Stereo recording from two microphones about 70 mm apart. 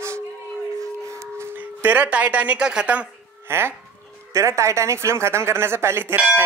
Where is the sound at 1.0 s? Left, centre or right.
Right.